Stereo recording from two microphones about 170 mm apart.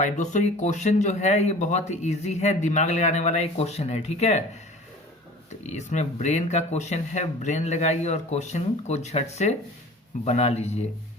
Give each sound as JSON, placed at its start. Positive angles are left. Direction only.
{"t": 0.0, "sound": "speech", "side_deg": 45}
{"t": 5.5, "sound": "speech", "side_deg": 45}